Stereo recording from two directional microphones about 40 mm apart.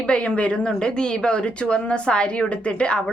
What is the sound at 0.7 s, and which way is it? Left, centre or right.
A woman's voice, centre.